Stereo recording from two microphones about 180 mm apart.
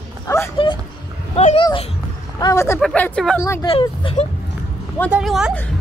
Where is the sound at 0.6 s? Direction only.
30° left (ahead or behind).